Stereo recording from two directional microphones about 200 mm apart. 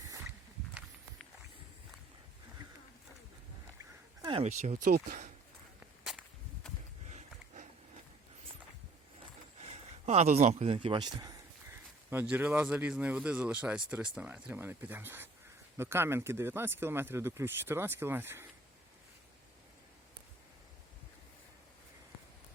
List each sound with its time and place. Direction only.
4.2 s speech: 30° right (ahead or behind); by 5.3 s 45° right (ahead or behind)
6.1 s whip: centre (ahead or behind)
7.1 s a sound: 35° right (ahead or behind)
9.6 s speech: 30° right (ahead or behind)
12.1 s speech: 10° right (ahead or behind)